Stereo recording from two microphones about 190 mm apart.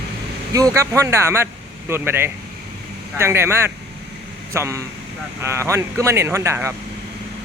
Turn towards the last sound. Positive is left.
turn(degrees=-15)  # may be behind; listen again after turning